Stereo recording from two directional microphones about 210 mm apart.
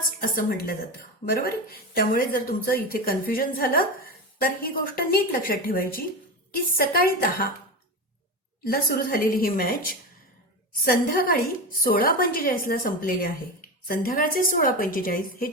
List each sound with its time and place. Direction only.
0.2 s speech: 45° left (ahead or behind)
8.6 s speech: 45° left (ahead or behind)